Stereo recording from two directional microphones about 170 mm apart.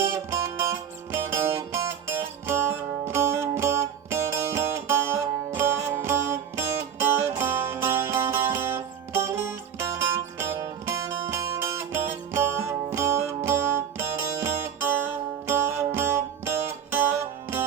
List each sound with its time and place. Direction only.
0.0 s music: 15° right (ahead or behind)